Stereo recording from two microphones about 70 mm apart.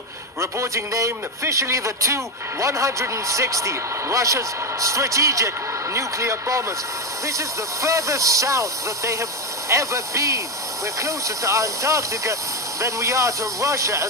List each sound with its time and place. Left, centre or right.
0.4 s a man's voice: right